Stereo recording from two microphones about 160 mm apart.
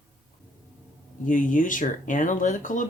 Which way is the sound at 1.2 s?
55° left (ahead or behind).